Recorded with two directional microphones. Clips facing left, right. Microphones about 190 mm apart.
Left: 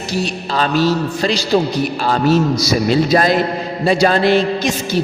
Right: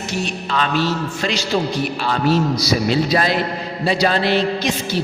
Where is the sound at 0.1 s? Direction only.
35° left (ahead or behind).